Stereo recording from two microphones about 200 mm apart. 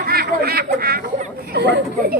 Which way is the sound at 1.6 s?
55° right (ahead or behind).